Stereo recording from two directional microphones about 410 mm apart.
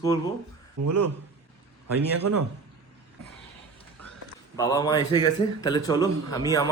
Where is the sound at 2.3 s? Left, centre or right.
Right.